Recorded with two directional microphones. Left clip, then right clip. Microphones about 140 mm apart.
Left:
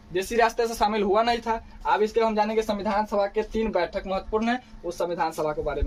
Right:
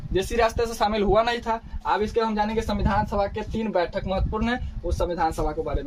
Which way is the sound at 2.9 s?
55° right (ahead or behind).